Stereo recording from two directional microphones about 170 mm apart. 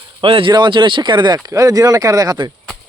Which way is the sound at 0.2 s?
30° right (ahead or behind).